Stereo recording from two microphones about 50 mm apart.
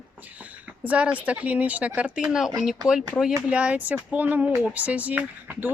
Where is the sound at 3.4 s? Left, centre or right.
Right.